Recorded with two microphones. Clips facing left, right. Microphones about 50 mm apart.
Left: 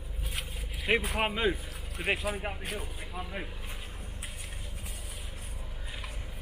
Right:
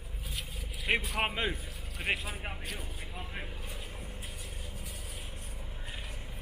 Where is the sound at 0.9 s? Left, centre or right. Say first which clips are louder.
Left 2 dB; centre.